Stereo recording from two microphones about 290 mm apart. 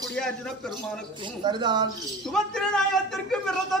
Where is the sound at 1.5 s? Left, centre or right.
Centre.